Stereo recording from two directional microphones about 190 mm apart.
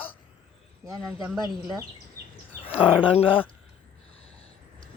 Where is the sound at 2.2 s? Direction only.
55° right (ahead or behind).